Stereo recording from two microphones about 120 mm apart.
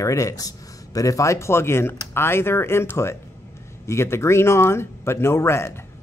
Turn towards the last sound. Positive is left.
turn(degrees=20)  # may be behind; listen again after turning